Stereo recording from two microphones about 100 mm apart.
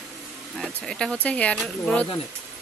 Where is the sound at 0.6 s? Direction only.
5° left (ahead or behind).